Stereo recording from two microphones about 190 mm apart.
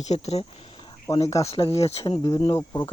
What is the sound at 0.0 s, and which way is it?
Speech, 35° left (ahead or behind).